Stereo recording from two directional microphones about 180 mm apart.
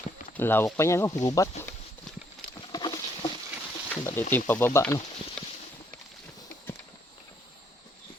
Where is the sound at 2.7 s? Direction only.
25° left (ahead or behind).